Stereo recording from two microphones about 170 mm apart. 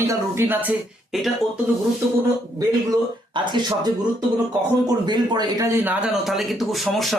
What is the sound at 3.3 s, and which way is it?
Speech, 30° right (ahead or behind).